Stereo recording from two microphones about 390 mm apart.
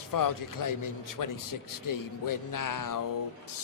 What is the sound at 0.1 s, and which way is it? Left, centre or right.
A man's voice, left.